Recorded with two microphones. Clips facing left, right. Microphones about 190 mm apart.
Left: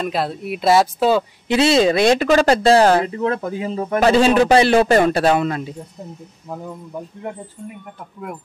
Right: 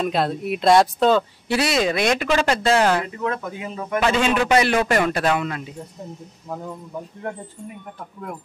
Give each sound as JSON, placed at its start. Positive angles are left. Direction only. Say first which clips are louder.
{"t": 0.0, "sound": "speech", "louder": "right 1 dB", "side_deg": 0}
{"t": 1.5, "sound": "speech", "louder": "left 6 dB", "side_deg": 25}